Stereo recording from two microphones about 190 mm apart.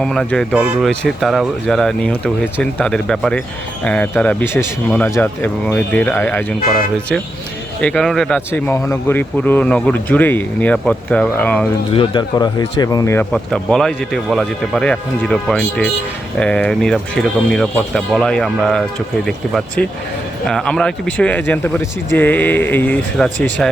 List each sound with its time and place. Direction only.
0.0 s a man's voice: 5° left (ahead or behind)
7.8 s a man's voice: 5° left (ahead or behind)
11.9 s speech: 25° left (ahead or behind)
13.3 s a man's voice: 5° left (ahead or behind)